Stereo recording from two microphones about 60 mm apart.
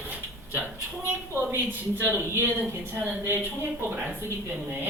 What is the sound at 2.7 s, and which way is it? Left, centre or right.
Speech, right.